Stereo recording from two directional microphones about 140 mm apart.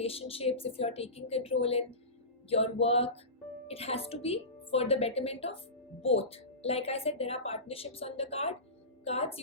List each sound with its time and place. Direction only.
0.0 s a woman's voice: 45° left (ahead or behind)